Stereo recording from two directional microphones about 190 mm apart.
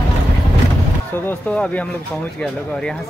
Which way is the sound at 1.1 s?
10° left (ahead or behind).